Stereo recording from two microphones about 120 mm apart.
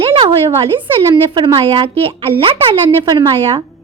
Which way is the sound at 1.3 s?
45° right (ahead or behind).